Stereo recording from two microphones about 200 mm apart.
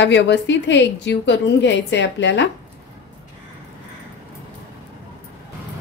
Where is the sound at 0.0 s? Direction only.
65° left (ahead or behind).